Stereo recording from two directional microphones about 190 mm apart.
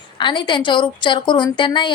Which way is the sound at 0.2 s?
25° left (ahead or behind).